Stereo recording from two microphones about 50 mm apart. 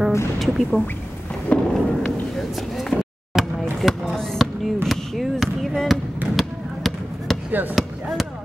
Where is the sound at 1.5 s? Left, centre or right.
Left.